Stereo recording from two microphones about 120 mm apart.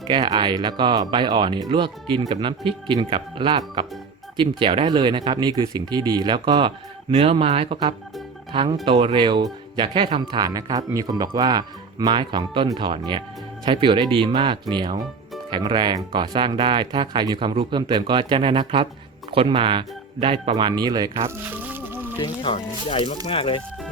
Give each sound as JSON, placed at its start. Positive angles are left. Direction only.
{"t": 0.1, "sound": "speech", "side_deg": -40}
{"t": 20.7, "sound": "speech", "side_deg": -35}
{"t": 21.2, "sound": "music", "side_deg": -15}
{"t": 22.2, "sound": "speech", "side_deg": 45}
{"t": 22.5, "sound": "speech", "side_deg": 55}